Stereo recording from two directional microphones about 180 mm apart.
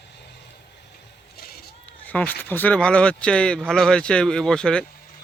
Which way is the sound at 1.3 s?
60° left (ahead or behind).